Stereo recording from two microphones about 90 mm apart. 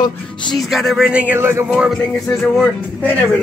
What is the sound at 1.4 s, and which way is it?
Speech, 30° right (ahead or behind).